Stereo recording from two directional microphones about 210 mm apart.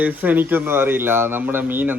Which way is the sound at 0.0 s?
10° right (ahead or behind).